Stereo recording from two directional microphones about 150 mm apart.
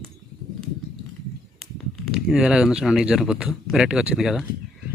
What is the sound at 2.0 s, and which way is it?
Speech, centre (ahead or behind).